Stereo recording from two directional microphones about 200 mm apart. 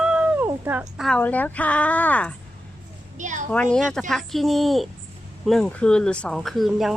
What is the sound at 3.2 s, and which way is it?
Speech, 40° right (ahead or behind).